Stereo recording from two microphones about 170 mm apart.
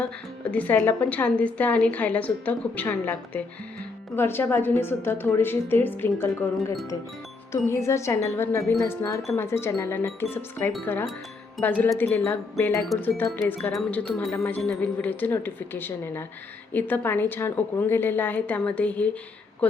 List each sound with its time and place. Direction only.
0.5 s a woman's voice: 10° left (ahead or behind)